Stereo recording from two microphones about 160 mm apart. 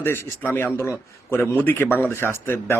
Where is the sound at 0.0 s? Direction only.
15° left (ahead or behind).